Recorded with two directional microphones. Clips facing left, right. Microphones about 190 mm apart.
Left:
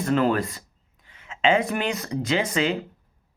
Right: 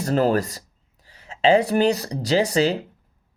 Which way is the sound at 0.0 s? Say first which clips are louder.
Right 2 dB; 35° right (ahead or behind).